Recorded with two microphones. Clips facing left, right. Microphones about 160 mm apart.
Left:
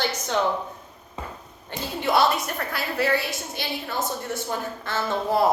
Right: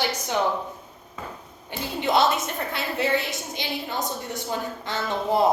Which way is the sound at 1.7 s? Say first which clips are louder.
Even; 20° right (ahead or behind).